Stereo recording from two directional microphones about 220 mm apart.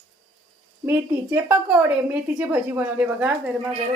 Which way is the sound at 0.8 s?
10° right (ahead or behind).